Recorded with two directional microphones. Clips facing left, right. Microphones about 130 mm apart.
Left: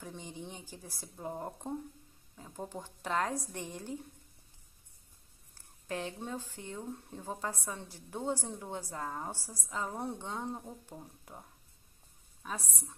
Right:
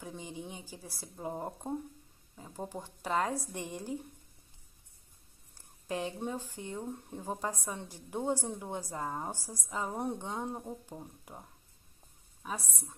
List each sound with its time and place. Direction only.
0.0 s a woman's voice: 5° right (ahead or behind)
5.5 s a woman's voice: 15° right (ahead or behind)
12.4 s a woman's voice: 10° right (ahead or behind)